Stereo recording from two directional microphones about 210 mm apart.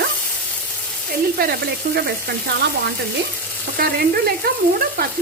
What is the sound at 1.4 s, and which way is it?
Speech, 45° right (ahead or behind).